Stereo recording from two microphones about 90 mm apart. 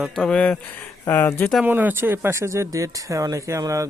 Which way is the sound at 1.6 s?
20° right (ahead or behind).